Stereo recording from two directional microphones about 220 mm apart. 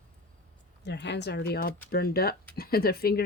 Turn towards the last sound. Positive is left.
turn(degrees=45)  # may be behind; listen again after turning